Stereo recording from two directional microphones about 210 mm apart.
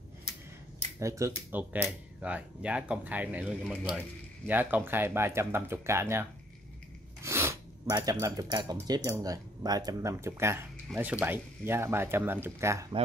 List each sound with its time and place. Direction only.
0.9 s speech: 15° right (ahead or behind)
7.2 s speech: 15° right (ahead or behind)